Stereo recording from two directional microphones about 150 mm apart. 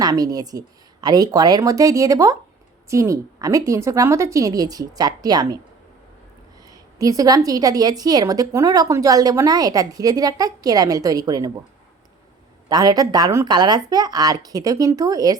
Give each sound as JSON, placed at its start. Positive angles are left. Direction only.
{"t": 0.0, "sound": "a woman's voice", "side_deg": -25}
{"t": 6.7, "sound": "a woman's voice", "side_deg": -25}
{"t": 12.6, "sound": "a woman's voice", "side_deg": -25}